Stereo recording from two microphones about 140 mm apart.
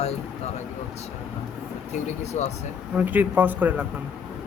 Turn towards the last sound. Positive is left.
turn(degrees=-15)  # may be behind; listen again after turning